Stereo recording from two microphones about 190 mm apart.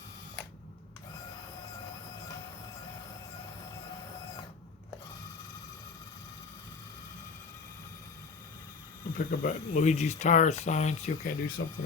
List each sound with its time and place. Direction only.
9.1 s speech: 45° left (ahead or behind)